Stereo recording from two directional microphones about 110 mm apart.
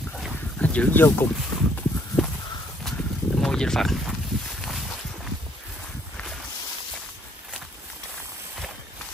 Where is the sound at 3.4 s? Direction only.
5° left (ahead or behind).